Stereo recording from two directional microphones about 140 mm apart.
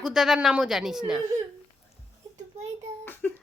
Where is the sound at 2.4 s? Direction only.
55° right (ahead or behind).